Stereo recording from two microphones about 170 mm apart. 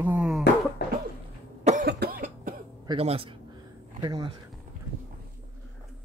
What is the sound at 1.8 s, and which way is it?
Cough, 70° right (ahead or behind).